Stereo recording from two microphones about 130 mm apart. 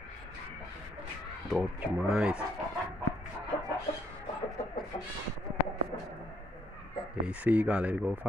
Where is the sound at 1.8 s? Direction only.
5° right (ahead or behind).